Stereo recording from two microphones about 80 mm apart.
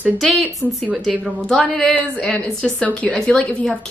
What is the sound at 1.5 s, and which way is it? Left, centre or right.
A woman's voice, centre.